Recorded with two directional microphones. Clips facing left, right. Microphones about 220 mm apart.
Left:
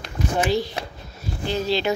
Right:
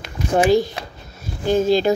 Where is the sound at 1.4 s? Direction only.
50° right (ahead or behind).